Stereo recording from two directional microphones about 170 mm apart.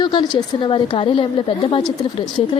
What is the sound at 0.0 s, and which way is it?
A woman's voice, 25° left (ahead or behind).